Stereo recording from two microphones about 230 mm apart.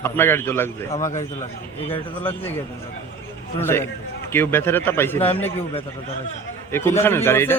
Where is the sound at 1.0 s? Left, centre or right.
Left.